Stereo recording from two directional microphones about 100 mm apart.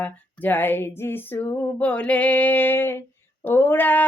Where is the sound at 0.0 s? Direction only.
20° left (ahead or behind).